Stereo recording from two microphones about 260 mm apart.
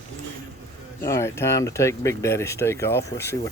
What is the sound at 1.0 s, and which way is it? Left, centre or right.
Speech, centre.